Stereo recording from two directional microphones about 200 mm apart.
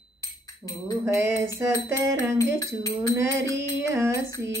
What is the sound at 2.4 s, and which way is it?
Speech, 15° left (ahead or behind).